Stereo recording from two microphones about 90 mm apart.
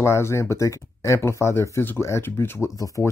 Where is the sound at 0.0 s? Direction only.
30° left (ahead or behind).